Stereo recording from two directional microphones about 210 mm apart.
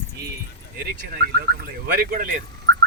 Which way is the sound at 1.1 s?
45° right (ahead or behind).